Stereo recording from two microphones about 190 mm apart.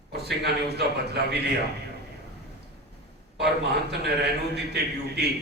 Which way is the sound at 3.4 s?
60° right (ahead or behind).